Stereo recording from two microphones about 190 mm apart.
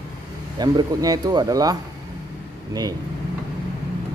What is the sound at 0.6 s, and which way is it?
Speech, 20° right (ahead or behind).